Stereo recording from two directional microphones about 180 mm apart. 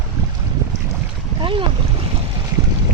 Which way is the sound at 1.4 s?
30° right (ahead or behind).